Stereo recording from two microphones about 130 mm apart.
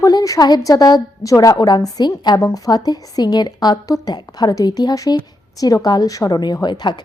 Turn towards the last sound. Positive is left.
turn(degrees=35)  # may be behind; listen again after turning